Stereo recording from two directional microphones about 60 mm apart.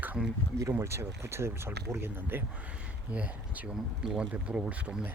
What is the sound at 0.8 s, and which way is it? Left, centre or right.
Speech, right.